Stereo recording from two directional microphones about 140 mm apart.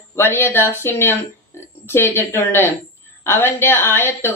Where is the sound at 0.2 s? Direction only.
15° left (ahead or behind).